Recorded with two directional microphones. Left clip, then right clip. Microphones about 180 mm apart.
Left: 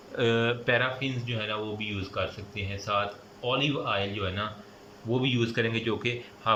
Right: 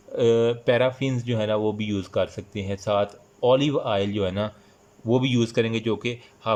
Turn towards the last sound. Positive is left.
turn(degrees=-25)  # may be behind; listen again after turning